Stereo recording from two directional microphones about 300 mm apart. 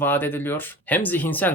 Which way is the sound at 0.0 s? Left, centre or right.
Centre.